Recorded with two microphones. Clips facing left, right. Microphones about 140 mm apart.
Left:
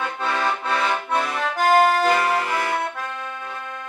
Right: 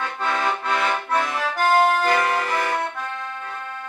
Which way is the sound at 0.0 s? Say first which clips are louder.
Even; 5° left (ahead or behind).